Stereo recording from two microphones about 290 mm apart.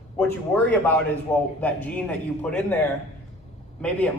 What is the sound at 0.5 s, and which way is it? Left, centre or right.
Speech, centre.